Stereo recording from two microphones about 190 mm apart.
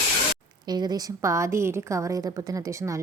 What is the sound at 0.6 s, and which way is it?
A woman's voice, 20° right (ahead or behind).